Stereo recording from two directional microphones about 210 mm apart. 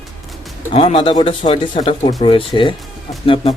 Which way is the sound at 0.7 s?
25° left (ahead or behind).